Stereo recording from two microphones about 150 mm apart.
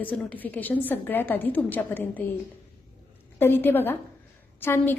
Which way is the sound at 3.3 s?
15° left (ahead or behind).